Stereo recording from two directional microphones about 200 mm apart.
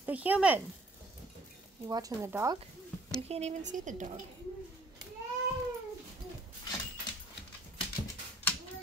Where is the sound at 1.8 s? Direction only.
15° right (ahead or behind).